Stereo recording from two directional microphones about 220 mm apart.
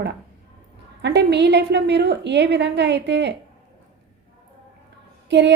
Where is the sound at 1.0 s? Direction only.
50° right (ahead or behind).